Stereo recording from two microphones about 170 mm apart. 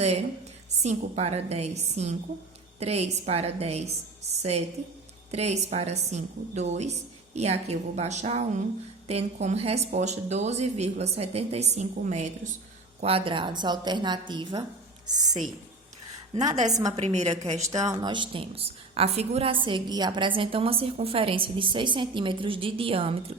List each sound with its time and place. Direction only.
0.0 s a sound: 40° right (ahead or behind)
0.8 s a woman's voice: 40° right (ahead or behind)
5.3 s a woman's voice: 40° right (ahead or behind); by 15.4 s 25° right (ahead or behind)
16.6 s a woman's voice: 20° right (ahead or behind)
17.0 s a woman's voice: 40° right (ahead or behind)
17.8 s a woman's voice: 25° right (ahead or behind)